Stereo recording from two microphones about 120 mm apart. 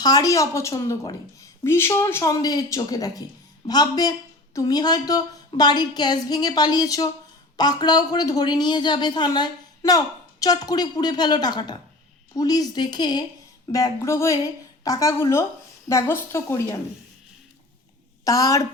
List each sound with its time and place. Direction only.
0.0 s a woman's voice: 30° left (ahead or behind)
2.2 s a woman's voice: 30° left (ahead or behind)
18.3 s a woman's voice: 30° left (ahead or behind)